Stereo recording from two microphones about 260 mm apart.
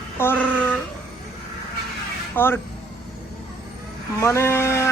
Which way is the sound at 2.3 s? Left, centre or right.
Centre.